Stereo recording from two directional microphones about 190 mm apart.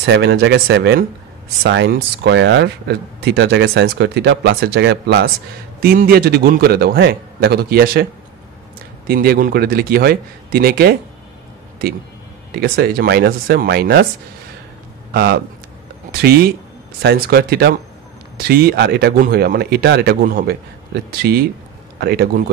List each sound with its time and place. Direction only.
0.0 s a man's voice: 60° right (ahead or behind)
12.5 s speech: 55° right (ahead or behind)
15.1 s speech: 55° right (ahead or behind)